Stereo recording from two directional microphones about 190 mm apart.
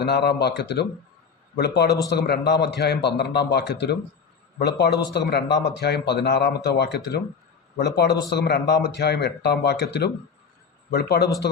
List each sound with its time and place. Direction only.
0.0 s a man's voice: 60° left (ahead or behind)